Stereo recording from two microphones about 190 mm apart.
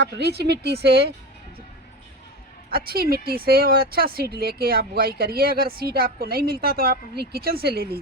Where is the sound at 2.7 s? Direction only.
55° right (ahead or behind).